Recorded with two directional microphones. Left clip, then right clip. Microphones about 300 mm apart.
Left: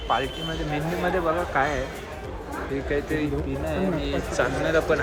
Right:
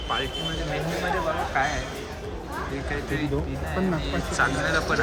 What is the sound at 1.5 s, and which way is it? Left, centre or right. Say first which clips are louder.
Speech: left 1 dB; centre.